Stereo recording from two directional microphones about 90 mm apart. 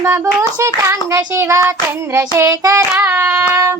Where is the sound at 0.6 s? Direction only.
35° right (ahead or behind).